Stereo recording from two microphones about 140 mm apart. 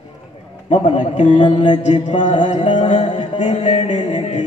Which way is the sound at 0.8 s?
60° left (ahead or behind).